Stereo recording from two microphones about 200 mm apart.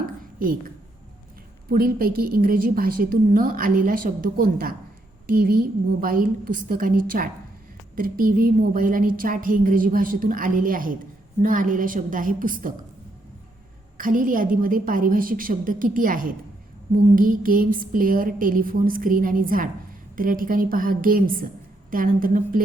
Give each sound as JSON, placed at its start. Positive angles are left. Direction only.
{"t": 0.0, "sound": "whispering", "side_deg": -45}
{"t": 1.7, "sound": "a woman's voice", "side_deg": -50}
{"t": 14.0, "sound": "a woman's voice", "side_deg": -40}